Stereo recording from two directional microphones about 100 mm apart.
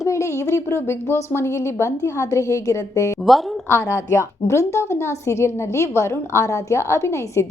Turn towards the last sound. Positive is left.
turn(degrees=30)  # may be behind; listen again after turning